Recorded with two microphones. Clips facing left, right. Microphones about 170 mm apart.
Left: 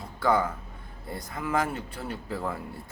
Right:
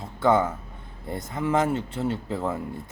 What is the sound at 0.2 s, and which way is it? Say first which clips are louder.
Speech: right 4 dB; 25° right (ahead or behind).